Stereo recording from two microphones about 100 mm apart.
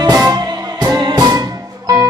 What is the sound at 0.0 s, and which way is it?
Music, 35° right (ahead or behind).